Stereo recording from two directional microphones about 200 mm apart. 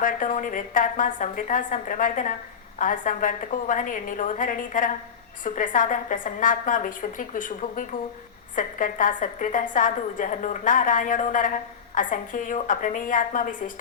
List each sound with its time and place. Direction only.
0.0 s a woman's voice: 40° left (ahead or behind)